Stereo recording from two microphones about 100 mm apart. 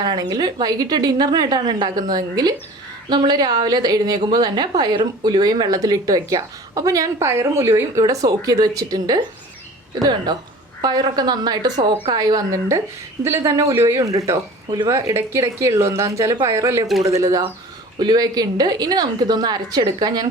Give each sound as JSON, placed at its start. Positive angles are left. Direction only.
{"t": 0.0, "sound": "a woman's voice", "side_deg": -45}